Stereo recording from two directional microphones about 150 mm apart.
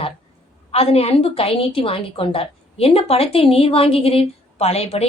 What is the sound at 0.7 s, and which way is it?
A woman's voice, 40° left (ahead or behind).